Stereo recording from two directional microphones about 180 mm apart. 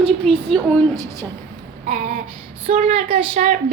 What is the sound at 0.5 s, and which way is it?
Music, centre (ahead or behind).